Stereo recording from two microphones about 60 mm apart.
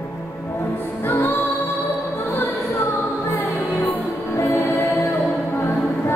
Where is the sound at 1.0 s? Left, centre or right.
Left.